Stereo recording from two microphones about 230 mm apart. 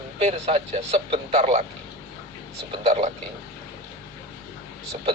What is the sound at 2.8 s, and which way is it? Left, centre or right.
Speech, right.